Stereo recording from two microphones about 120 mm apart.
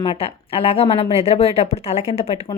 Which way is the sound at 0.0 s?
50° left (ahead or behind).